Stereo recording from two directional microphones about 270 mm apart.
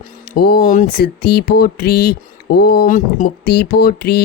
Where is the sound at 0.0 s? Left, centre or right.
Left.